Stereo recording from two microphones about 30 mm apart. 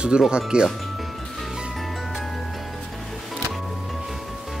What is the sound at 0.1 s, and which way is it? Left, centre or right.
Speech, right.